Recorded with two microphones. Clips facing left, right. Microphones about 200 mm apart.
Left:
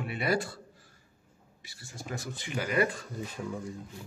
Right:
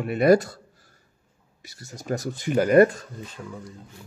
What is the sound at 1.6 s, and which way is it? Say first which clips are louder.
Speech: right 10 dB; 40° right (ahead or behind).